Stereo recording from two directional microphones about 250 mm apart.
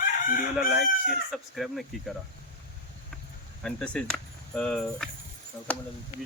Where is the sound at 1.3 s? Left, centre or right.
Centre.